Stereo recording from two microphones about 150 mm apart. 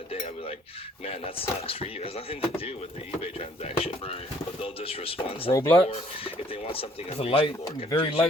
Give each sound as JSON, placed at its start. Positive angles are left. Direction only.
{"t": 1.0, "sound": "speech", "side_deg": 40}
{"t": 3.8, "sound": "speech", "side_deg": 40}
{"t": 5.5, "sound": "speech", "side_deg": 20}
{"t": 5.9, "sound": "speech", "side_deg": 40}